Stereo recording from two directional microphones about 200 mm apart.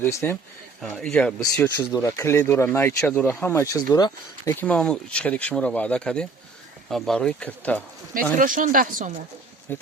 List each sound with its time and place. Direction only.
0.0 s speech: 10° left (ahead or behind)
0.8 s speech: centre (ahead or behind); by 4.5 s 20° left (ahead or behind)
4.6 s speech: 5° left (ahead or behind)
8.4 s speech: 40° right (ahead or behind)
9.7 s speech: 10° left (ahead or behind)